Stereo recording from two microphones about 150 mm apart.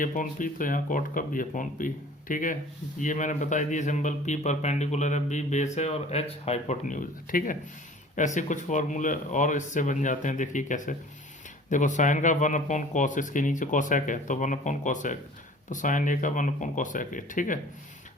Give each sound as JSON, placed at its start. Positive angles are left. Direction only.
{"t": 0.0, "sound": "speech", "side_deg": 60}